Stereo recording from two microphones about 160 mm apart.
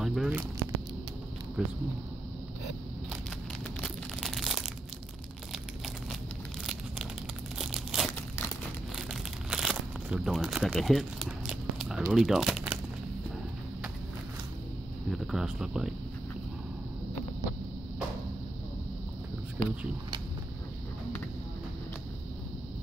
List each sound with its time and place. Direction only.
0.0 s speech: centre (ahead or behind)
1.6 s speech: 5° right (ahead or behind)
3.8 s a sound: centre (ahead or behind)
6.6 s crumpling: centre (ahead or behind)
15.0 s speech: centre (ahead or behind)